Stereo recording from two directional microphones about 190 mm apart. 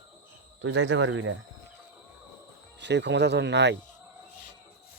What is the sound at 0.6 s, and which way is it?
Speech, 90° right.